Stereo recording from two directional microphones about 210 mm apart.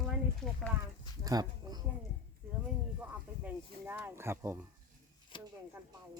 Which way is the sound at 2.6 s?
5° right (ahead or behind).